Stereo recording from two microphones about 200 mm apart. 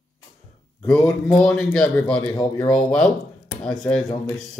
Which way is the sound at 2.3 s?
15° left (ahead or behind).